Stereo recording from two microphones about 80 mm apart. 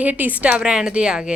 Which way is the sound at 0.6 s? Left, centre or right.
Centre.